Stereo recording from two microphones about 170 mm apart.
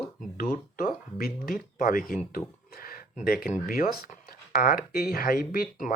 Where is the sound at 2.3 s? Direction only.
60° left (ahead or behind).